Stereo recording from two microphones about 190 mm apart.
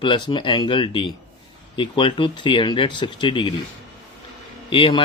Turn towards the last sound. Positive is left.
turn(degrees=30)  # may be behind; listen again after turning